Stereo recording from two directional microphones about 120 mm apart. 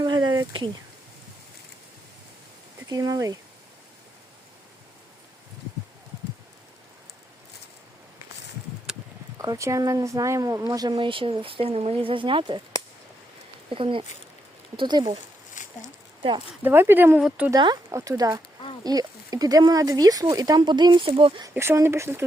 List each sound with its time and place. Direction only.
0.0 s a sound: 35° right (ahead or behind)
2.9 s speech: 30° right (ahead or behind)
9.4 s speech: 25° right (ahead or behind)
10.9 s speech: 45° right (ahead or behind)
13.7 s speech: 45° right (ahead or behind)
14.8 s speech: 35° right (ahead or behind)
15.6 s a sound: 90° left
16.6 s speech: 20° right (ahead or behind)
17.9 s speech: 25° right (ahead or behind)
21.1 s speech: 50° right (ahead or behind)
21.5 s speech: 20° right (ahead or behind)